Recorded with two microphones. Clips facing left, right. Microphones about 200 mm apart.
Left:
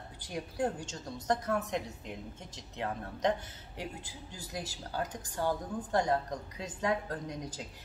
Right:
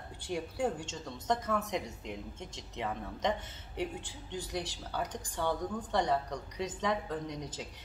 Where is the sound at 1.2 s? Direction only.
Centre (ahead or behind).